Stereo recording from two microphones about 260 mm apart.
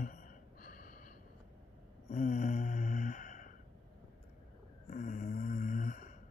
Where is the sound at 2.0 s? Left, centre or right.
Left.